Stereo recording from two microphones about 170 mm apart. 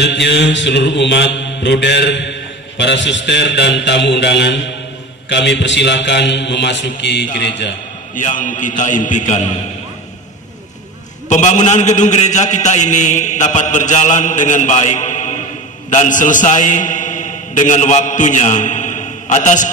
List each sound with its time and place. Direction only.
0.0 s mantra: 90° left
7.3 s a man's voice: 85° left
8.1 s a man's voice: 50° left (ahead or behind)
11.2 s a man's voice: 45° left (ahead or behind)